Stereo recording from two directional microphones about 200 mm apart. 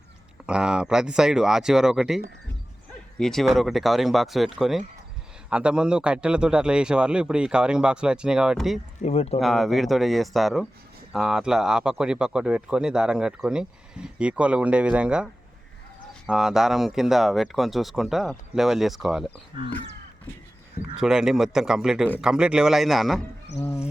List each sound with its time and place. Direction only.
0.4 s speech: 5° right (ahead or behind)
9.0 s speech: 35° left (ahead or behind)
9.4 s speech: centre (ahead or behind)
19.5 s speech: 25° right (ahead or behind)
21.0 s speech: 5° right (ahead or behind)
23.6 s a sound: 15° left (ahead or behind)